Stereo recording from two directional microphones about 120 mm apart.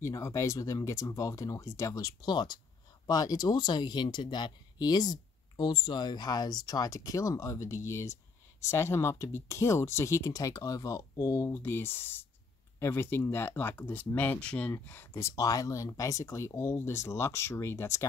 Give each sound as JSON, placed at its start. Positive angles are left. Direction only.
{"t": 0.0, "sound": "speech", "side_deg": 25}